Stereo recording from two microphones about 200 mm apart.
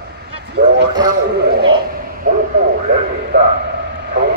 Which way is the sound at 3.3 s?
60° right (ahead or behind).